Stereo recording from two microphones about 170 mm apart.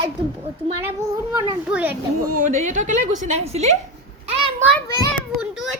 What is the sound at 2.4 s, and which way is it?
A woman's voice, 45° right (ahead or behind).